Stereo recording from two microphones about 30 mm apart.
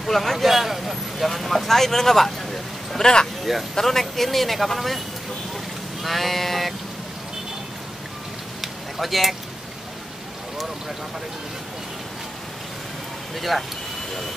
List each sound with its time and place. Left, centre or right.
0.1 s a man's voice: centre
3.0 s speech: left
3.7 s a man's voice: centre
6.0 s a man's voice: centre
8.5 s a sound: centre
13.4 s a man's voice: centre